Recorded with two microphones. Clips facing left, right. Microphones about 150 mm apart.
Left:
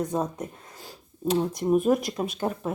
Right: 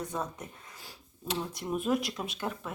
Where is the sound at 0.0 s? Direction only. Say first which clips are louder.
Left 8 dB; 40° left (ahead or behind).